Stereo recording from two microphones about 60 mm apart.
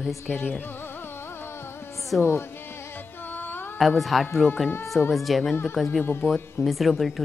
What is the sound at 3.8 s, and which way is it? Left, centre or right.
Speech, centre.